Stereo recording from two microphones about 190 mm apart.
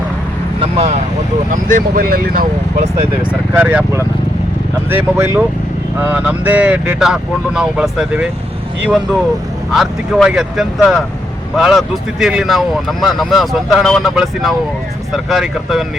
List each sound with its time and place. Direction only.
0.6 s vehicle: 30° right (ahead or behind)
1.5 s speech: 45° right (ahead or behind)
3.5 s speech: 10° right (ahead or behind)
9.7 s speech: centre (ahead or behind)